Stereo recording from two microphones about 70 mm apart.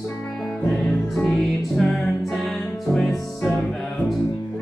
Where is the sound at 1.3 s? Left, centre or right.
Centre.